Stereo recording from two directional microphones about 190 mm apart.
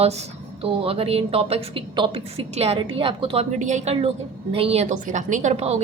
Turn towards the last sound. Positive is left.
turn(degrees=-35)  # may be behind; listen again after turning